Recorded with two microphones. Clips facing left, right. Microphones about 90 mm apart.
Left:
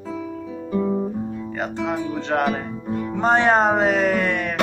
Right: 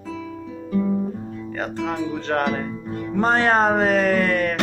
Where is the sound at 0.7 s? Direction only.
30° left (ahead or behind).